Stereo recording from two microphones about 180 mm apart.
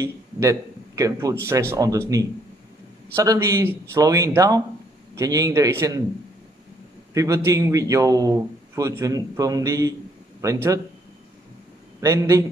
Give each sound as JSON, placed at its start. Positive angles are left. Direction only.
{"t": 0.0, "sound": "a man's voice", "side_deg": -15}
{"t": 7.2, "sound": "a man's voice", "side_deg": -15}
{"t": 12.0, "sound": "speech", "side_deg": -15}